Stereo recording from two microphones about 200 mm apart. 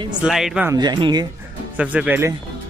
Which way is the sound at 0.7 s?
20° right (ahead or behind).